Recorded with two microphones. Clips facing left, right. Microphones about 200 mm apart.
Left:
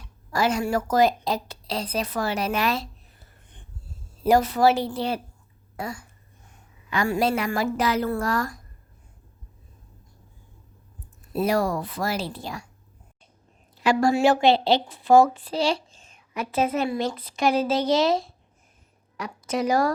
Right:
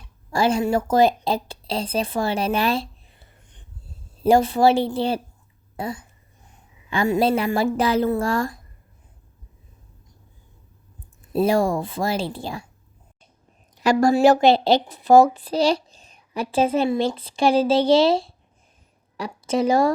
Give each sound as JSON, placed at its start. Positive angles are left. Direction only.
{"t": 0.3, "sound": "speech", "side_deg": -30}
{"t": 4.2, "sound": "speech", "side_deg": -30}
{"t": 6.9, "sound": "speech", "side_deg": -25}
{"t": 11.3, "sound": "speech", "side_deg": -25}
{"t": 13.8, "sound": "a woman's voice", "side_deg": -40}